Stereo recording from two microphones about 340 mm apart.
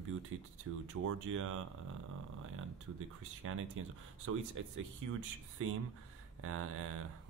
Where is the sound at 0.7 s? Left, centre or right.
Right.